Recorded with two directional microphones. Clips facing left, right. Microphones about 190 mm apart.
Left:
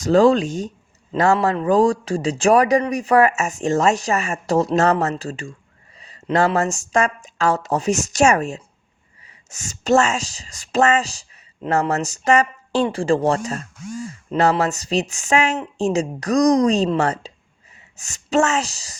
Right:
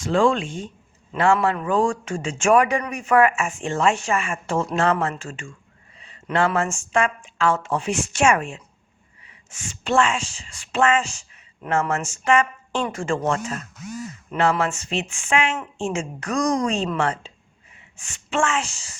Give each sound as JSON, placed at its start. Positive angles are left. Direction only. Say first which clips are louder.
{"t": 0.0, "sound": "speech", "louder": "left 5 dB", "side_deg": 40}